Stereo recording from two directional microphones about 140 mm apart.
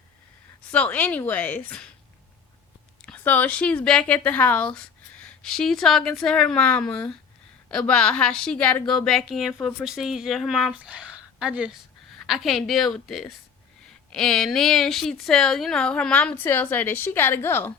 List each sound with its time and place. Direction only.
0.7 s speech: 10° left (ahead or behind)
3.0 s speech: 10° left (ahead or behind)
16.3 s speech: 15° left (ahead or behind)